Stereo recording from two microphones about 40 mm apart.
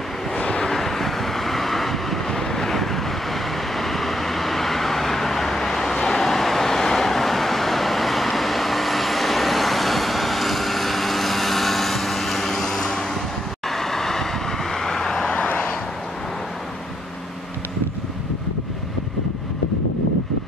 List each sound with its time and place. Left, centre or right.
0.4 s vehicle: left
0.7 s vehicle: centre
15.3 s vehicle: left